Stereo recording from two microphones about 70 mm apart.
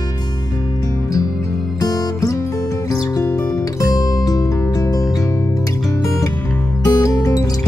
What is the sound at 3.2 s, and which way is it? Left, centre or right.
Music, left.